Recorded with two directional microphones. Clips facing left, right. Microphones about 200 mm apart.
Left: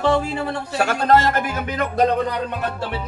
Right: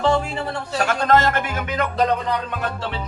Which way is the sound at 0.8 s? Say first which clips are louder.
Left 1 dB; 35° left (ahead or behind).